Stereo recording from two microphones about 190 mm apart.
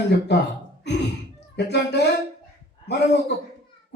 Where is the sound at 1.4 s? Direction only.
65° left (ahead or behind).